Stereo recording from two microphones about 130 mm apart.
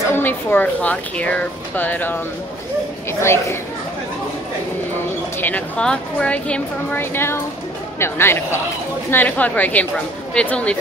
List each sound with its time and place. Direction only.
0.1 s speech: 15° left (ahead or behind)
5.4 s speech: 10° left (ahead or behind)